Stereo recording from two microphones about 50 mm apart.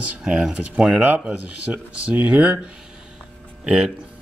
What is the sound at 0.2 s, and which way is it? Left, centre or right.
Speech, centre.